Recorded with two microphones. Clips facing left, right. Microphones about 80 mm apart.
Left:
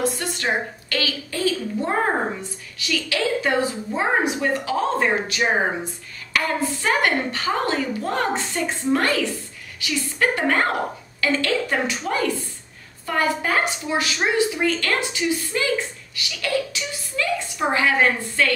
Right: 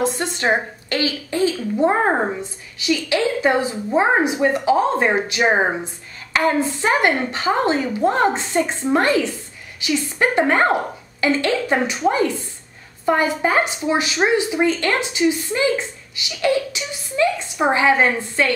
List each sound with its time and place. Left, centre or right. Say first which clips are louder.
0.0 s speech: right 4 dB; right